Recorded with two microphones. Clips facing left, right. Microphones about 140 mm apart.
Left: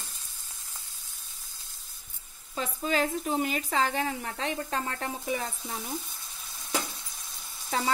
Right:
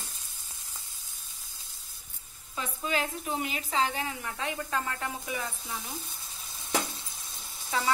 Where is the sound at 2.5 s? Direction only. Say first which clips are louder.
Left 3 dB; 40° left (ahead or behind).